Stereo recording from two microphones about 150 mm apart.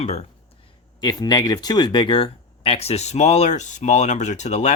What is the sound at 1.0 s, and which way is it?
Speech, 25° left (ahead or behind).